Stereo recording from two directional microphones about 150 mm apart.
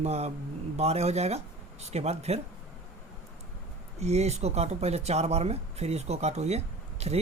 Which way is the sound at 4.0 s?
45° right (ahead or behind).